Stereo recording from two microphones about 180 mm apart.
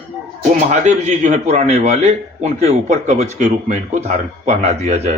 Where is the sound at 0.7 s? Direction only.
40° right (ahead or behind).